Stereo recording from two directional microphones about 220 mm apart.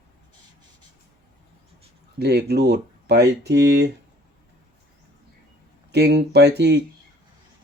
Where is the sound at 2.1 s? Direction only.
45° right (ahead or behind).